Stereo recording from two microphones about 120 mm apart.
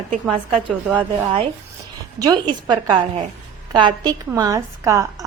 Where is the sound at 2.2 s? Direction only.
30° right (ahead or behind).